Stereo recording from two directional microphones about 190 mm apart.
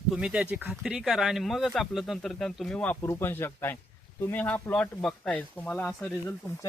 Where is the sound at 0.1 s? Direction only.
5° right (ahead or behind).